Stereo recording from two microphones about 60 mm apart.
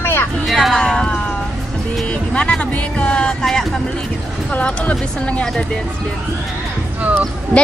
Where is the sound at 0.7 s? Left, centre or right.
Centre.